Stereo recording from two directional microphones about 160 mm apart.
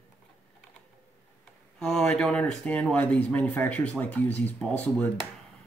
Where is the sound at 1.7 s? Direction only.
5° left (ahead or behind).